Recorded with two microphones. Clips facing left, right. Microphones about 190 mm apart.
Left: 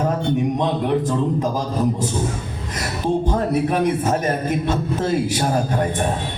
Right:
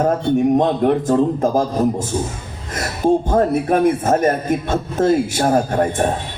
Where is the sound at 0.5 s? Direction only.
50° right (ahead or behind).